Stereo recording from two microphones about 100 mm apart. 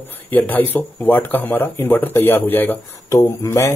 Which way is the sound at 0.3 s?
15° left (ahead or behind).